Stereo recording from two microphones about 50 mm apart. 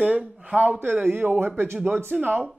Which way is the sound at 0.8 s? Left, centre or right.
Right.